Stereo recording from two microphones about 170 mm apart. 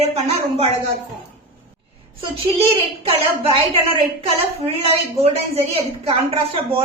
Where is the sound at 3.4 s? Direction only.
35° right (ahead or behind).